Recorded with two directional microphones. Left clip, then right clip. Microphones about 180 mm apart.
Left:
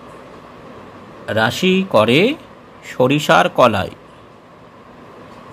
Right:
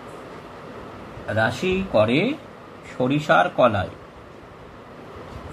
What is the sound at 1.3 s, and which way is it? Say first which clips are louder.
Speech: left 6 dB; 65° left (ahead or behind).